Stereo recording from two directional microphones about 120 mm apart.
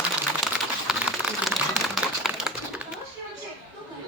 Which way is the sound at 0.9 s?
Centre (ahead or behind).